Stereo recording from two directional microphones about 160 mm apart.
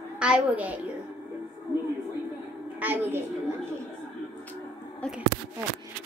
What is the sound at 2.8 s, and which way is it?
Speech, 10° right (ahead or behind).